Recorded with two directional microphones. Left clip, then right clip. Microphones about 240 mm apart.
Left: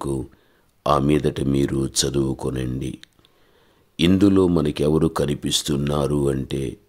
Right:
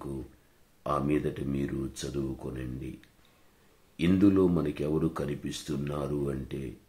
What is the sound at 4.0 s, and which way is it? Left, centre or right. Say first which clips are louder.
Speech: left 8 dB; left.